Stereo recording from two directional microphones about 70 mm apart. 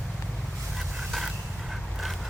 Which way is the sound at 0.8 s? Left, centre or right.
Centre.